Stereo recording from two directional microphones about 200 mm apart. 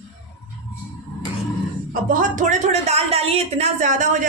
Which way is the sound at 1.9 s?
45° right (ahead or behind).